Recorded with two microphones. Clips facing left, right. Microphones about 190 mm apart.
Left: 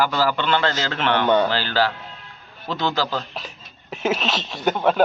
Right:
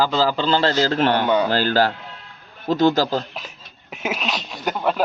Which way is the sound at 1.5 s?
45° right (ahead or behind).